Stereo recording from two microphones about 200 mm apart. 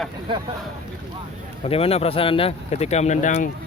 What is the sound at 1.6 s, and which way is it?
Speech, 30° left (ahead or behind).